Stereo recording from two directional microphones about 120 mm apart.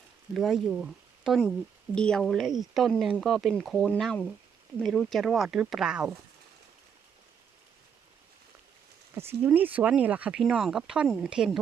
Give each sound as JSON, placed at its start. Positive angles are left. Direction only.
{"t": 0.3, "sound": "speech", "side_deg": 0}
{"t": 9.1, "sound": "speech", "side_deg": -20}